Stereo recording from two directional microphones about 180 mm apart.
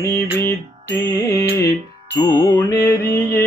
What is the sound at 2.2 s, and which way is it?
Music, 20° left (ahead or behind).